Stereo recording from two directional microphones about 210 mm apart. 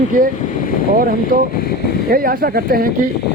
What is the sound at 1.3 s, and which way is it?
A man's voice, 40° right (ahead or behind).